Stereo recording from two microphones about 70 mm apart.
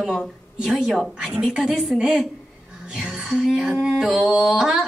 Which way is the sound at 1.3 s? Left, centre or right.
Centre.